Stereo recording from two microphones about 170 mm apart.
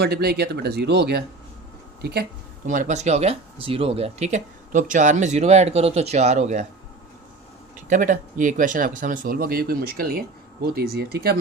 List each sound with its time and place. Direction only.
0.0 s speech: 70° right (ahead or behind)
2.6 s speech: 45° right (ahead or behind)
7.9 s speech: 50° right (ahead or behind); by 11.3 s 65° right (ahead or behind)